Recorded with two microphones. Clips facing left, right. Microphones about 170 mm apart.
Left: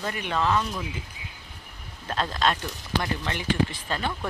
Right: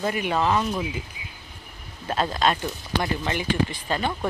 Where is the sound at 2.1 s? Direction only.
10° right (ahead or behind).